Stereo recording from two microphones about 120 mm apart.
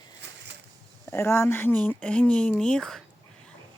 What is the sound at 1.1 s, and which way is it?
Speech, 20° left (ahead or behind).